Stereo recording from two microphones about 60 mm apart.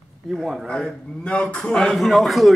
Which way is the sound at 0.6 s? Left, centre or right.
Centre.